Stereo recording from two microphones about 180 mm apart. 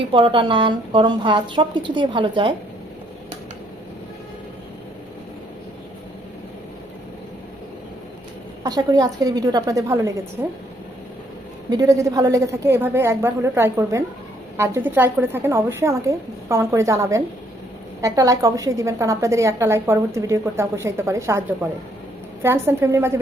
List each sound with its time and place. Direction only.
0.1 s speech: 30° right (ahead or behind)
8.6 s a woman's voice: 20° right (ahead or behind)
11.7 s a woman's voice: 20° right (ahead or behind)
22.4 s a woman's voice: 15° right (ahead or behind)